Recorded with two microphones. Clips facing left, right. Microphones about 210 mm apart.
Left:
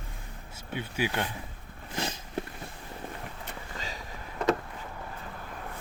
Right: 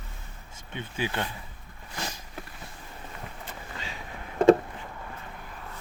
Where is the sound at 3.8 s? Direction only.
40° left (ahead or behind).